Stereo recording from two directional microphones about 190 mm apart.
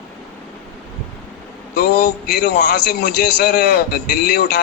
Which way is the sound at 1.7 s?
60° left (ahead or behind).